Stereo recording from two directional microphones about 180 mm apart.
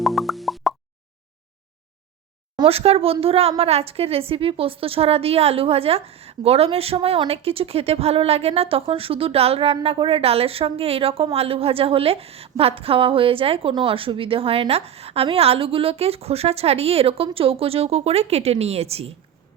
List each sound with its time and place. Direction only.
0.0 s plop: centre (ahead or behind)
2.6 s a woman's voice: 35° right (ahead or behind)